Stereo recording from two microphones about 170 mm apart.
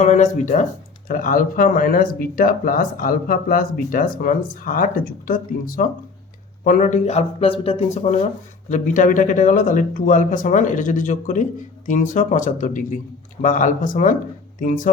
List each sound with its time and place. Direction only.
0.0 s speech: 45° left (ahead or behind)